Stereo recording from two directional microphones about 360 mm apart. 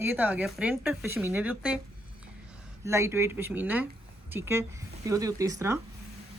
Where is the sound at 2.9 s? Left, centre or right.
Centre.